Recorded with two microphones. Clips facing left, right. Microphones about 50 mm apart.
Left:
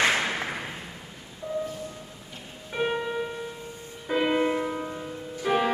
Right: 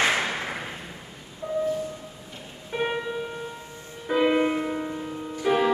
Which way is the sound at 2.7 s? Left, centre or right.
Centre.